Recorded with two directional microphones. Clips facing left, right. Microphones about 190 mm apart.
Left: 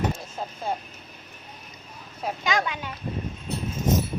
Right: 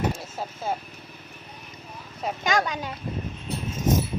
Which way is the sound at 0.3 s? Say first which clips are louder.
Even; 5° right (ahead or behind).